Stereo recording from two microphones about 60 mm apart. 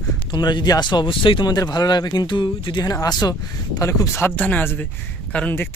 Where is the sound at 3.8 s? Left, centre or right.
Left.